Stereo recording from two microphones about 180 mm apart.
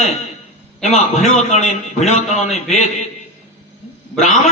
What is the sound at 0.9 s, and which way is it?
A man's voice, 35° left (ahead or behind).